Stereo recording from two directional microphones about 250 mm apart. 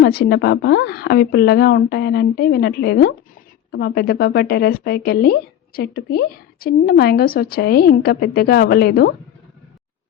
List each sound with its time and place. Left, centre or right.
0.0 s a woman's voice: left